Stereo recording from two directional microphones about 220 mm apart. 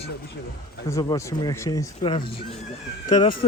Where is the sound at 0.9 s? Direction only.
15° left (ahead or behind).